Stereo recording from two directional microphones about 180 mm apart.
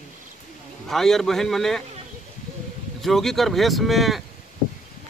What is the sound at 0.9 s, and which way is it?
Speech, centre (ahead or behind).